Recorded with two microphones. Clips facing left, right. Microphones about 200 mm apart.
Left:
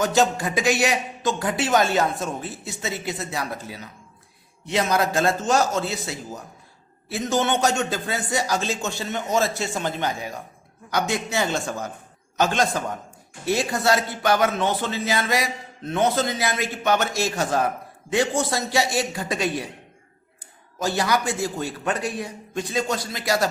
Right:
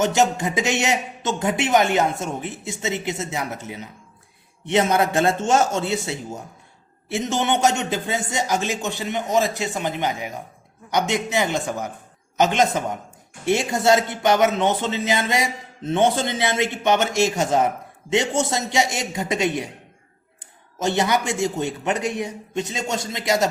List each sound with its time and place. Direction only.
0.0 s a man's voice: 20° right (ahead or behind)
20.7 s a man's voice: 25° right (ahead or behind)